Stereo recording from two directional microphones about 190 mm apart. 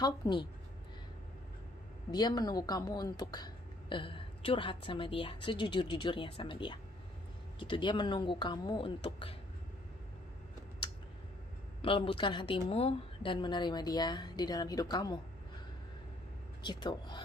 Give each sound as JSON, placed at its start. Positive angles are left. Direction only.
{"t": 0.0, "sound": "speech", "side_deg": 25}
{"t": 2.0, "sound": "speech", "side_deg": 20}
{"t": 11.8, "sound": "speech", "side_deg": 30}
{"t": 16.6, "sound": "speech", "side_deg": 25}